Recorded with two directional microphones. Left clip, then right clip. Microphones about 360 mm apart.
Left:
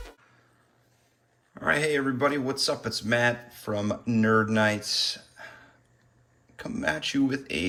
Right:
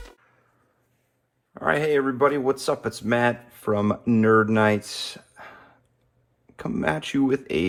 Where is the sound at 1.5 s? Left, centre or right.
Centre.